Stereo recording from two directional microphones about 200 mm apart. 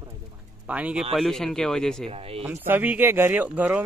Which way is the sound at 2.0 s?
30° right (ahead or behind).